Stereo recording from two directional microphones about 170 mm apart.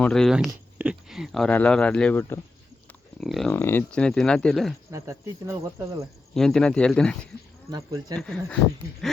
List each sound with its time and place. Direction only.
0.0 s speech: 5° left (ahead or behind)
3.5 s speech: 15° left (ahead or behind)
4.9 s speech: 20° right (ahead or behind)
6.3 s speech: 5° left (ahead or behind)
7.7 s speech: 25° right (ahead or behind)
8.2 s speech: 5° left (ahead or behind)